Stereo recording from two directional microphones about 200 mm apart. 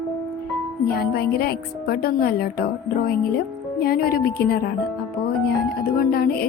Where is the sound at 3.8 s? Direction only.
50° left (ahead or behind).